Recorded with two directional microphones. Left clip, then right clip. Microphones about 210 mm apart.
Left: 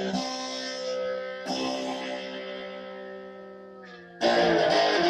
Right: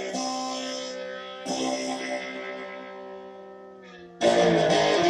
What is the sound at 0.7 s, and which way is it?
Music, 10° right (ahead or behind).